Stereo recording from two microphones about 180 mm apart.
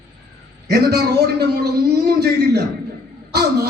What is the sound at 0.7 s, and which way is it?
A man's voice, 65° right (ahead or behind).